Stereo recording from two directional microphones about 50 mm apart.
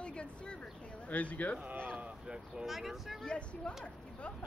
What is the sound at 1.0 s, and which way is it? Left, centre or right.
Speech, left.